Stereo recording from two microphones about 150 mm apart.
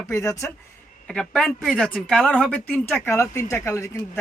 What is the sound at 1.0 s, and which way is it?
Speech, 5° left (ahead or behind).